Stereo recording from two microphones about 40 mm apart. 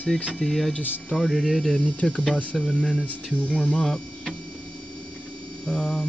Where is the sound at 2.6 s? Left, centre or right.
Centre.